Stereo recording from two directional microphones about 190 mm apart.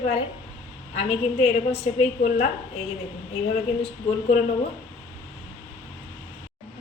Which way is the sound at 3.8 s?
35° left (ahead or behind).